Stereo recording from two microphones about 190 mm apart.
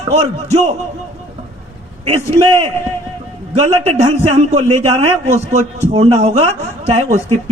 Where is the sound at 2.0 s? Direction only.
35° right (ahead or behind).